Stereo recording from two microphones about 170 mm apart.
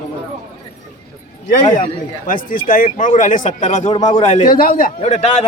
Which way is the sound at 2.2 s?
55° left (ahead or behind).